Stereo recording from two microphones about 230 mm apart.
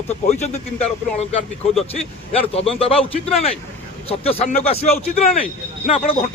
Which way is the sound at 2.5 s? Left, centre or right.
Left.